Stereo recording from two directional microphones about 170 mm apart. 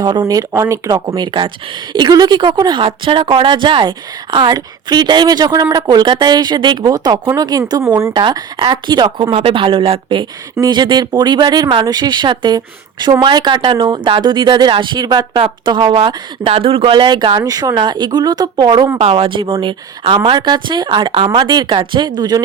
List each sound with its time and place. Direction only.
0.0 s speech: 25° right (ahead or behind)